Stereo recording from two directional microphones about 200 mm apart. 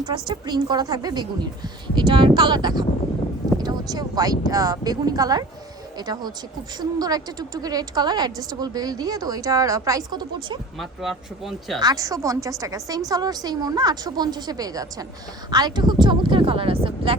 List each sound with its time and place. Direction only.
0.0 s a woman's voice: 20° right (ahead or behind)
10.8 s speech: centre (ahead or behind)
11.8 s a woman's voice: 20° right (ahead or behind)